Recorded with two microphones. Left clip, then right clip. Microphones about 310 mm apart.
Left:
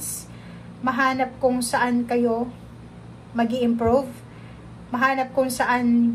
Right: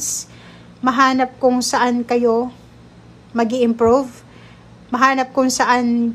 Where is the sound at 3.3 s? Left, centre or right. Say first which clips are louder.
Right 6 dB; centre.